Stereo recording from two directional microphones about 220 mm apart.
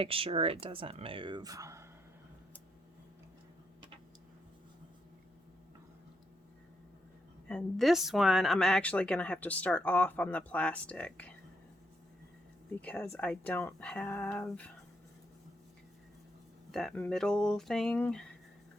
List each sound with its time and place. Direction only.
0.0 s speech: 25° right (ahead or behind)
7.4 s speech: centre (ahead or behind)
12.8 s speech: 5° left (ahead or behind)
16.7 s speech: 5° left (ahead or behind)